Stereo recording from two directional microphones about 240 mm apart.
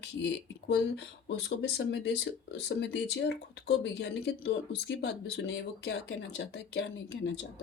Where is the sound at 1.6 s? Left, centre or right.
Left.